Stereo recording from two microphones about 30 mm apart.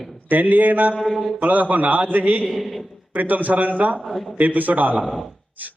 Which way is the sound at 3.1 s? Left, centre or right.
Right.